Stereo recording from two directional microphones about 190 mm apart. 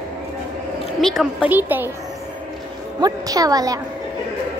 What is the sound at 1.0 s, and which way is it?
Speech, centre (ahead or behind).